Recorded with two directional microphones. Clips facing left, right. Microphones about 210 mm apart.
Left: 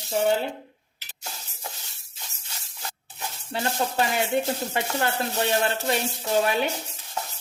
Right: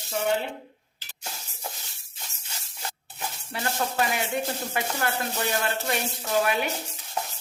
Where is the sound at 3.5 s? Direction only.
30° left (ahead or behind).